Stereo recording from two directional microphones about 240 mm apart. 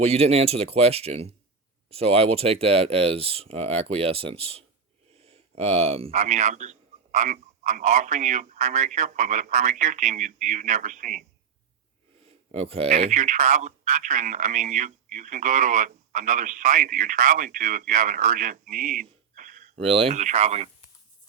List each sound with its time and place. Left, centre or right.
0.0 s speech: right
12.2 s speech: right